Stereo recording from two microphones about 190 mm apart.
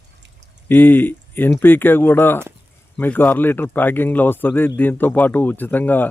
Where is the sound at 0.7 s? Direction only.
10° left (ahead or behind).